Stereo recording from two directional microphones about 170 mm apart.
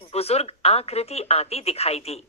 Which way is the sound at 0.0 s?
35° left (ahead or behind).